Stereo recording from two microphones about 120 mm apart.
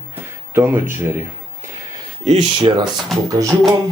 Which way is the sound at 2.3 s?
55° right (ahead or behind).